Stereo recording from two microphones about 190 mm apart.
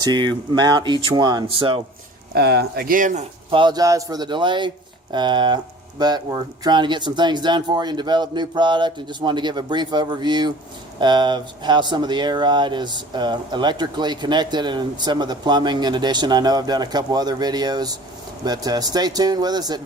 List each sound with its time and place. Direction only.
0.0 s speech: 20° right (ahead or behind)
2.3 s speech: 60° right (ahead or behind); by 3.2 s 45° right (ahead or behind)
3.5 s speech: 25° right (ahead or behind)